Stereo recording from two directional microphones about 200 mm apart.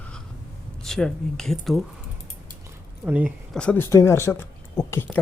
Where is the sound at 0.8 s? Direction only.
5° left (ahead or behind).